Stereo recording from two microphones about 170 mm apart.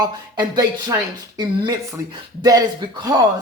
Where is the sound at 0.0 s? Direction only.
25° right (ahead or behind).